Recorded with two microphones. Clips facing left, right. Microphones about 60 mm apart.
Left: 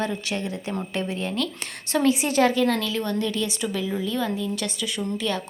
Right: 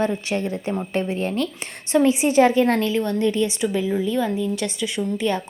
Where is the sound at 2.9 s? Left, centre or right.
Right.